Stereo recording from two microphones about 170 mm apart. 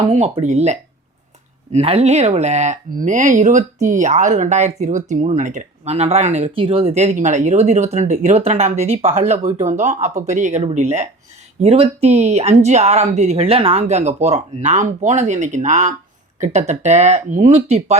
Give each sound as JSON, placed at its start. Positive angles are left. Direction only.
{"t": 0.1, "sound": "speech", "side_deg": -40}